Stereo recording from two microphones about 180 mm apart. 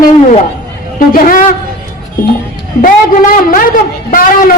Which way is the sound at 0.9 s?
50° left (ahead or behind).